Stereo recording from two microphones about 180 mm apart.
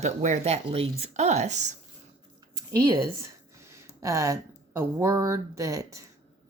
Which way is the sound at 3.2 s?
15° right (ahead or behind).